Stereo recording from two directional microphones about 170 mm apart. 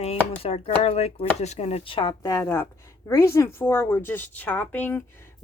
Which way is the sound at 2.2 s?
20° left (ahead or behind).